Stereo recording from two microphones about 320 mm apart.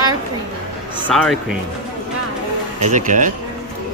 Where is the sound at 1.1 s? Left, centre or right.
Centre.